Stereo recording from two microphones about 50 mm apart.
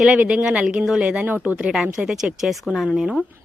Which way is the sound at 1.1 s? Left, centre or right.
Right.